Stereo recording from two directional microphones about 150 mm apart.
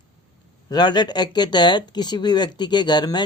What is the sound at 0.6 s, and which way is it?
Speech, 30° left (ahead or behind).